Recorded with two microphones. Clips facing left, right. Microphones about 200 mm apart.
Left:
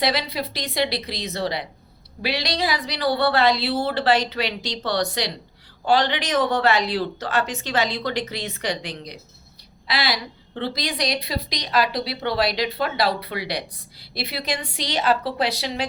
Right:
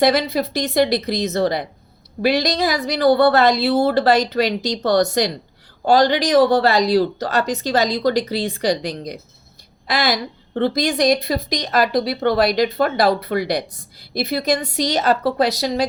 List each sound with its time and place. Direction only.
0.0 s a woman's voice: 45° right (ahead or behind)